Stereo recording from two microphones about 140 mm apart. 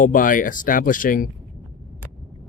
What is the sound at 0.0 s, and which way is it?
Speech, 75° left (ahead or behind).